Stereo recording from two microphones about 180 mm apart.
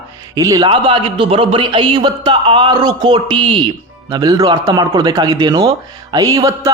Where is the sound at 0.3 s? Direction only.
20° right (ahead or behind).